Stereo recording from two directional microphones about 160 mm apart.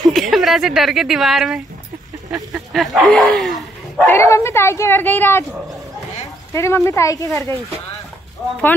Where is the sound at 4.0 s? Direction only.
15° left (ahead or behind).